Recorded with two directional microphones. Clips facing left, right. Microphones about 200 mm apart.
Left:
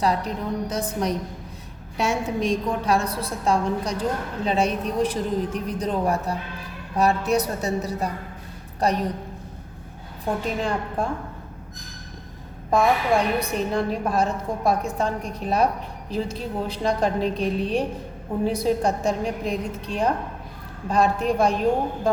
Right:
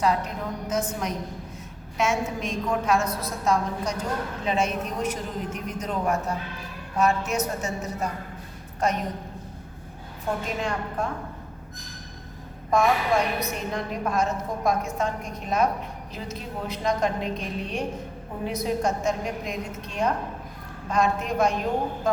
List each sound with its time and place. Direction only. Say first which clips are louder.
0.0 s a woman's voice: left 1 dB; 35° left (ahead or behind)
10.6 s a woman's voice: left 3 dB; 30° left (ahead or behind)
12.7 s a woman's voice: left 2 dB; 30° left (ahead or behind)